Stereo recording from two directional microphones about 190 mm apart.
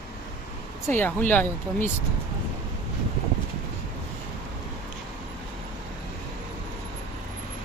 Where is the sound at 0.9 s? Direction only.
10° left (ahead or behind).